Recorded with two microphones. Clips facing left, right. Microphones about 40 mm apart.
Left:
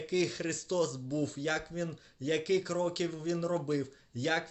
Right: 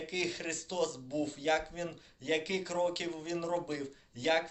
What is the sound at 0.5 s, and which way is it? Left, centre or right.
Speech, right.